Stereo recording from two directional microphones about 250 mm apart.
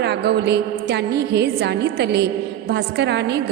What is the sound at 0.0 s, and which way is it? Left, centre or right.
A woman's voice, right.